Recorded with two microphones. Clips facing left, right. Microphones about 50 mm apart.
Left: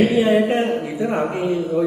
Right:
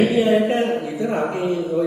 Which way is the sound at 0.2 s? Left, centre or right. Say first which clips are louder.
Left 1 dB; centre.